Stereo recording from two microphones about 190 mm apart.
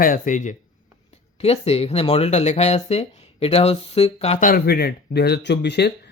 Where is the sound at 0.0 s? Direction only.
45° left (ahead or behind).